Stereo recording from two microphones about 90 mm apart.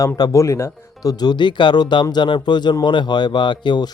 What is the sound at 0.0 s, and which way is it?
Speech, 35° left (ahead or behind).